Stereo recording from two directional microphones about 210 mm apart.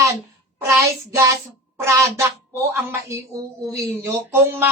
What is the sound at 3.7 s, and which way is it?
Speech, 10° right (ahead or behind).